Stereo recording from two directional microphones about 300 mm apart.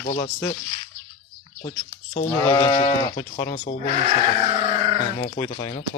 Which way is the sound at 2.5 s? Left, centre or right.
Centre.